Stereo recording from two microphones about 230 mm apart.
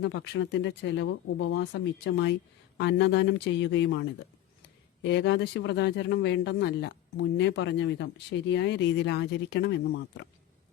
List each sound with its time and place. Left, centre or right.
0.0 s speech: left